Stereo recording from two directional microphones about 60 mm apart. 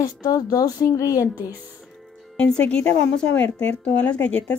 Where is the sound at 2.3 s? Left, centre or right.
Centre.